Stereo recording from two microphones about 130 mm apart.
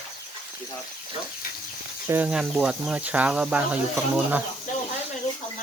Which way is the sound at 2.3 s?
5° right (ahead or behind).